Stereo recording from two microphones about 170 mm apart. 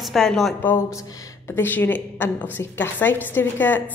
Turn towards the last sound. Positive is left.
turn(degrees=10)  # may be behind; listen again after turning